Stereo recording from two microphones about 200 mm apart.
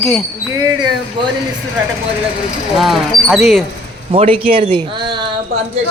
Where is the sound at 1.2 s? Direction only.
25° right (ahead or behind).